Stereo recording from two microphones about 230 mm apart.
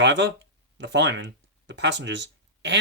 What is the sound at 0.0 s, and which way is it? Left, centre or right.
Speech, right.